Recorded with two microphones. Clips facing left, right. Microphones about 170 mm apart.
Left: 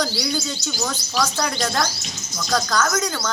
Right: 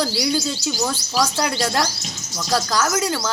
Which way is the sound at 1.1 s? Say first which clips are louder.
Right 1 dB; 10° right (ahead or behind).